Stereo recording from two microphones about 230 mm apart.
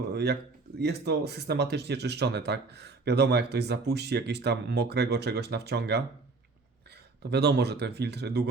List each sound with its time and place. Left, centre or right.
0.1 s speech: right
7.2 s speech: right